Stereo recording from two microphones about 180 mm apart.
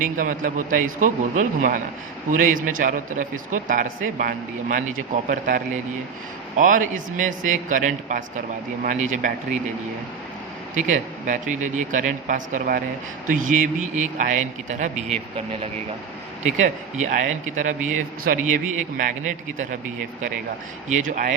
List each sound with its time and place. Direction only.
0.0 s speech: 50° right (ahead or behind)
10.8 s speech: 45° right (ahead or behind)
13.9 s speech: 45° right (ahead or behind)
16.4 s speech: 40° right (ahead or behind)
21.0 s speech: 45° right (ahead or behind)